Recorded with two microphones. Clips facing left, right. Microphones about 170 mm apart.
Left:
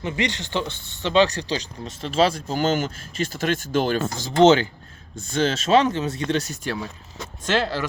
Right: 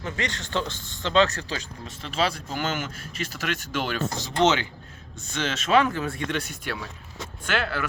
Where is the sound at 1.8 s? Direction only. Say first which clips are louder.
Left 6 dB; 30° left (ahead or behind).